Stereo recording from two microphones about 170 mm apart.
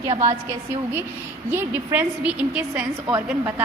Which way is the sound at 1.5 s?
10° right (ahead or behind).